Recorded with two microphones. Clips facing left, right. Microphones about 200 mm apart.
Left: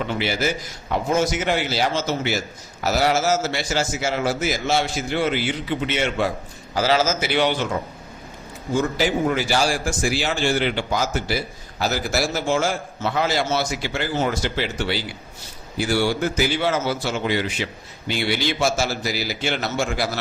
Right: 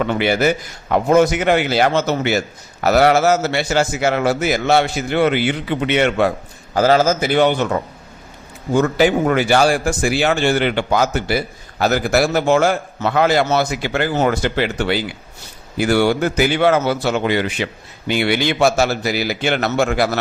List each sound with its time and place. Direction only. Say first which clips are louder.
0.0 s a man's voice: right 7 dB; 60° right (ahead or behind)
6.7 s a man's voice: right 6 dB; 50° right (ahead or behind)
8.7 s a man's voice: right 6 dB; 60° right (ahead or behind)